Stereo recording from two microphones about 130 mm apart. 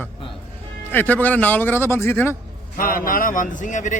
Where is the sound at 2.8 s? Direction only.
90° left; by 4.0 s 70° left (ahead or behind).